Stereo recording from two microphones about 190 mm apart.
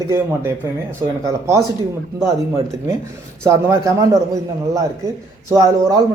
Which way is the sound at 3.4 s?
15° right (ahead or behind).